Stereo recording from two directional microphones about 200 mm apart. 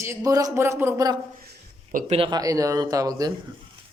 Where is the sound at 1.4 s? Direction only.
50° right (ahead or behind).